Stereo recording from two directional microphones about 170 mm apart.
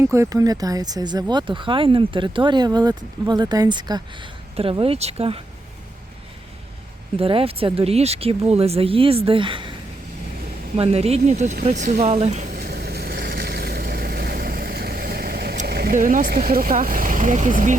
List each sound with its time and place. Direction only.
0.0 s speech: 15° right (ahead or behind); by 5.4 s 35° right (ahead or behind)
7.2 s speech: 35° right (ahead or behind)
10.8 s speech: 35° right (ahead or behind)
12.5 s vehicle: 65° right (ahead or behind)
15.6 s speech: 65° right (ahead or behind); by 17.7 s 50° right (ahead or behind)